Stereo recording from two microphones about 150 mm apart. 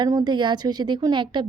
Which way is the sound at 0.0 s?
30° right (ahead or behind).